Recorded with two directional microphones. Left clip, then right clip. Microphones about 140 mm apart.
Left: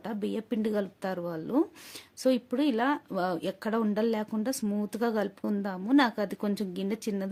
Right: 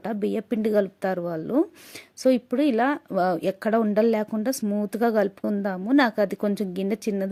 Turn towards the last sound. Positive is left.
turn(degrees=-35)  # may be behind; listen again after turning